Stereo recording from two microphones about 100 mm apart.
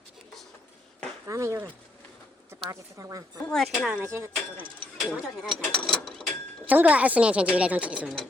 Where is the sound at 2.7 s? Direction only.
35° right (ahead or behind).